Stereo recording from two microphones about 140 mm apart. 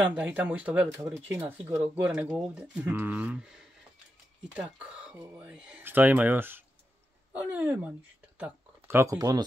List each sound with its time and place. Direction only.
0.1 s speech: 10° right (ahead or behind)
1.8 s speech: 5° right (ahead or behind); by 9.4 s 25° right (ahead or behind)